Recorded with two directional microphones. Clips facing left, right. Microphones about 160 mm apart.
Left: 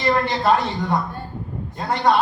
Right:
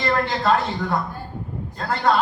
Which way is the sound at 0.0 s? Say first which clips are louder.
Left 2 dB; 15° left (ahead or behind).